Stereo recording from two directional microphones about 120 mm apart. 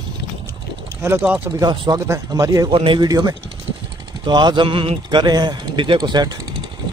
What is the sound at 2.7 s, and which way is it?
Speech, 45° right (ahead or behind).